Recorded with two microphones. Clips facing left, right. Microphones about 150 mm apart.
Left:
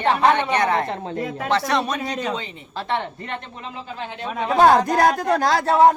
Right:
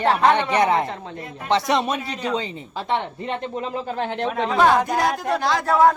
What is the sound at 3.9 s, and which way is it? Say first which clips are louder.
Speech: right 6 dB; 60° right (ahead or behind).